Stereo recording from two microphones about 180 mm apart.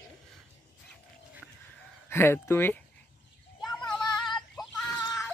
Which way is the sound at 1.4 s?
5° right (ahead or behind).